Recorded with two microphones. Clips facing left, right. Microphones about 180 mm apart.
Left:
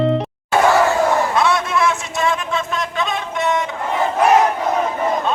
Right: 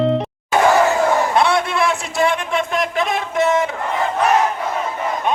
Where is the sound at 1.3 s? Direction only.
30° right (ahead or behind).